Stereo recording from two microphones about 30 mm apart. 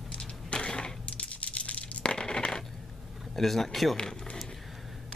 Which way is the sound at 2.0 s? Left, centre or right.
Left.